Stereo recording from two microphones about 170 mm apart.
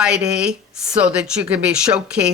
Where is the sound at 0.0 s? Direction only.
5° right (ahead or behind).